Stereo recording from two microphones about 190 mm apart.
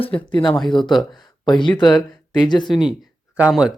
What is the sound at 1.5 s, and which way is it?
Speech, 25° left (ahead or behind).